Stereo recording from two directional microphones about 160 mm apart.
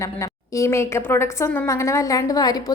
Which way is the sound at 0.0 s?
20° left (ahead or behind).